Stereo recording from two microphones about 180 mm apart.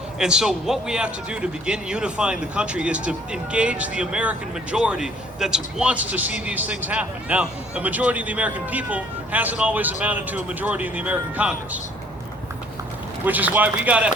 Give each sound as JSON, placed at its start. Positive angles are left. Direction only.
{"t": 0.2, "sound": "speech", "side_deg": -5}
{"t": 13.2, "sound": "speech", "side_deg": -10}